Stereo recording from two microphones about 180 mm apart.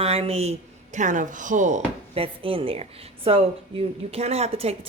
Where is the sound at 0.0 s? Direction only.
35° right (ahead or behind).